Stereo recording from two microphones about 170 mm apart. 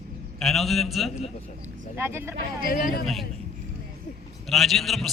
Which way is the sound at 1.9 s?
15° right (ahead or behind).